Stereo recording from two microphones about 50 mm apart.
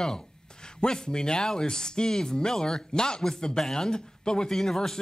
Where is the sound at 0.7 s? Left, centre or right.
Centre.